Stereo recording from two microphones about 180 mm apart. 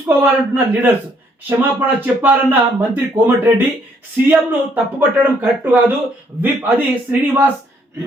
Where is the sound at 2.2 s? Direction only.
10° right (ahead or behind).